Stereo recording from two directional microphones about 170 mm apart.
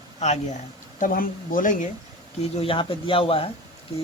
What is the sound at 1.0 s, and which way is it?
Speech, 55° left (ahead or behind).